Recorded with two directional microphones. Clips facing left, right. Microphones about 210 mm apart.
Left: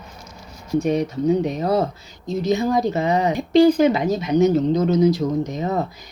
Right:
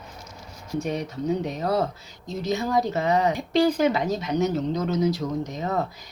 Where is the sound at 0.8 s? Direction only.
20° left (ahead or behind).